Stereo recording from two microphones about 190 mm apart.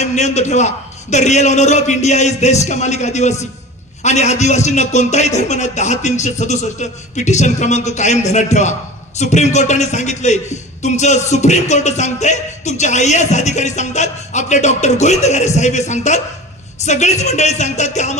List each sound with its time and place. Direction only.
0.0 s a man's voice: 35° left (ahead or behind)